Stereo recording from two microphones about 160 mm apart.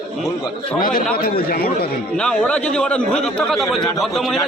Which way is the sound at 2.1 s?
5° left (ahead or behind).